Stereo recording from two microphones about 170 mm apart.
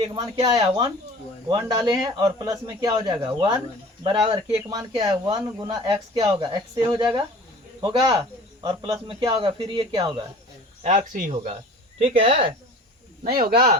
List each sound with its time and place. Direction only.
0.0 s speech: 30° right (ahead or behind)
4.7 s speech: 25° right (ahead or behind)
10.8 s speech: 50° right (ahead or behind)
11.9 s speech: 30° right (ahead or behind)
13.2 s speech: 60° right (ahead or behind)